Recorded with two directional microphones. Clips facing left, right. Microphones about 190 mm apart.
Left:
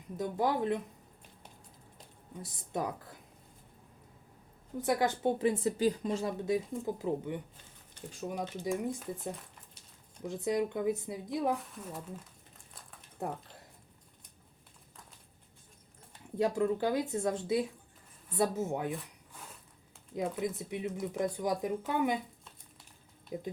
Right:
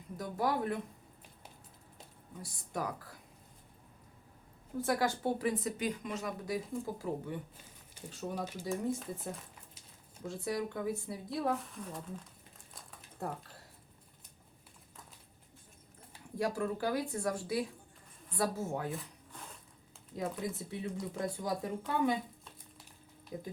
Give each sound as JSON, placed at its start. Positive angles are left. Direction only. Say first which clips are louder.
{"t": 0.2, "sound": "speech", "louder": "left 3 dB", "side_deg": 20}
{"t": 2.4, "sound": "speech", "louder": "left 3 dB", "side_deg": 25}
{"t": 4.8, "sound": "speech", "louder": "left 2 dB", "side_deg": 20}
{"t": 10.2, "sound": "speech", "louder": "left 5 dB", "side_deg": 20}
{"t": 11.7, "sound": "speech", "louder": "left 1 dB", "side_deg": 5}
{"t": 13.2, "sound": "speech", "louder": "left 2 dB", "side_deg": 20}
{"t": 16.4, "sound": "speech", "louder": "left 5 dB", "side_deg": 20}
{"t": 20.1, "sound": "speech", "louder": "left 3 dB", "side_deg": 20}
{"t": 23.3, "sound": "speech", "louder": "left 3 dB", "side_deg": 20}